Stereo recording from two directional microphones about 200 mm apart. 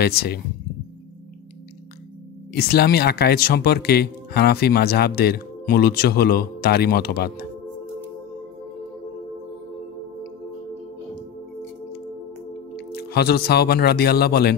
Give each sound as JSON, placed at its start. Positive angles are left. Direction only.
{"t": 0.0, "sound": "speech", "side_deg": 50}
{"t": 2.5, "sound": "speech", "side_deg": 50}
{"t": 12.7, "sound": "speech", "side_deg": 55}